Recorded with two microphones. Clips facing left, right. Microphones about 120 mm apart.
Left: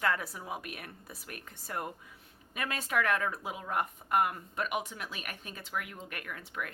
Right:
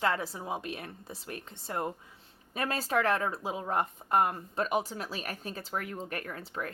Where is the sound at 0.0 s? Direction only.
25° right (ahead or behind).